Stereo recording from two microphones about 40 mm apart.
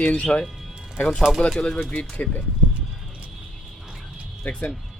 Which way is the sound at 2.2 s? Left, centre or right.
Left.